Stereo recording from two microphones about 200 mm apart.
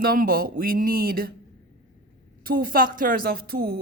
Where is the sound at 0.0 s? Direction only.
45° right (ahead or behind).